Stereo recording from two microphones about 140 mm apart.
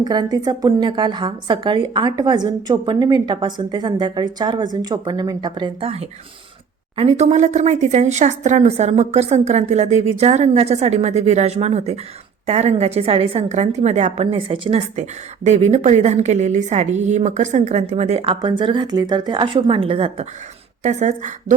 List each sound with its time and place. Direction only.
0.0 s a woman's voice: 30° right (ahead or behind)
6.9 s speech: 45° right (ahead or behind)
14.3 s a woman's voice: 40° right (ahead or behind)
20.8 s a woman's voice: 55° right (ahead or behind)